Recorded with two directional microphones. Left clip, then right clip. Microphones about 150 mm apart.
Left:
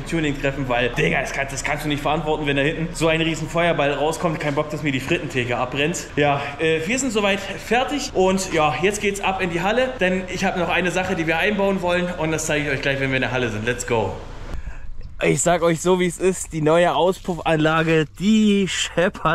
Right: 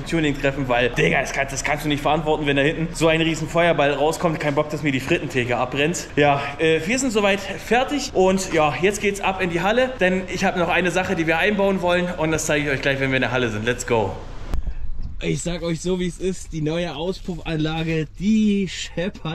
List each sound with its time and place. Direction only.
0.1 s speech: centre (ahead or behind)
16.0 s speech: 20° left (ahead or behind)
17.6 s speech: 25° right (ahead or behind)